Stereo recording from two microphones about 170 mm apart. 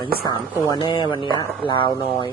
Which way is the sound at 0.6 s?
25° left (ahead or behind).